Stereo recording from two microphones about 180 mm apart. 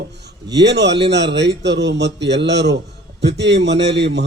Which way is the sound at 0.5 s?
70° right (ahead or behind).